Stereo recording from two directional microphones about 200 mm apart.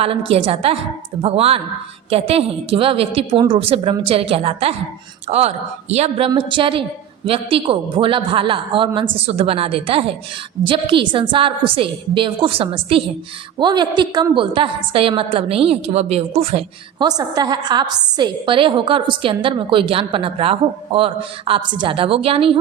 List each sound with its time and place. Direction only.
0.0 s a woman's voice: 30° right (ahead or behind)